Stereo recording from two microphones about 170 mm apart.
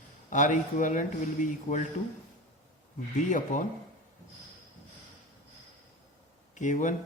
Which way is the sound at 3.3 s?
50° left (ahead or behind).